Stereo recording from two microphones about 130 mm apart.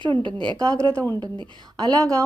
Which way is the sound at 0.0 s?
40° right (ahead or behind).